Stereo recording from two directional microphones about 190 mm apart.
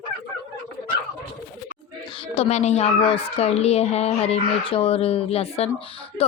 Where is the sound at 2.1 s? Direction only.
30° left (ahead or behind).